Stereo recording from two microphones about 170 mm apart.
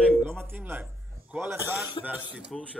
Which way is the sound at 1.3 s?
15° right (ahead or behind).